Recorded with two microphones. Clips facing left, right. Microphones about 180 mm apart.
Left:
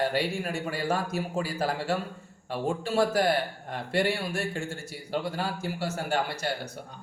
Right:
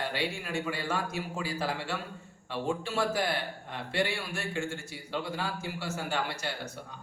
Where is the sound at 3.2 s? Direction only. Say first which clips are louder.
Left 6 dB; 45° left (ahead or behind).